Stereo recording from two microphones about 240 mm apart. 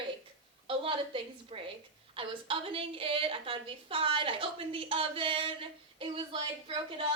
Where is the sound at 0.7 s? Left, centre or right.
Right.